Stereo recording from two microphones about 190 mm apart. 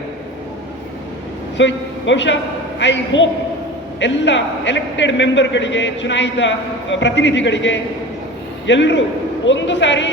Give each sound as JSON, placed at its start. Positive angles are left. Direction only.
{"t": 1.5, "sound": "a woman's voice", "side_deg": 70}